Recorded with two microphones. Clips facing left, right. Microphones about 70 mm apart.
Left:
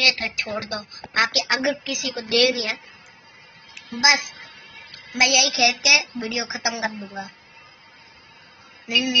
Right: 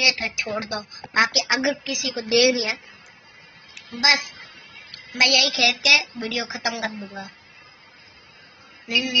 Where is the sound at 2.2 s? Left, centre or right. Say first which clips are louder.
Right 2 dB; centre.